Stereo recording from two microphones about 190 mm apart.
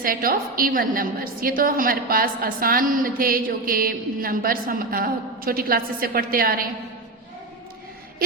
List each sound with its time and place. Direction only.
0.0 s a woman's voice: 50° right (ahead or behind)